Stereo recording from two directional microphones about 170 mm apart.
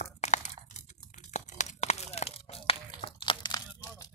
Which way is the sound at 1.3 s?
45° left (ahead or behind).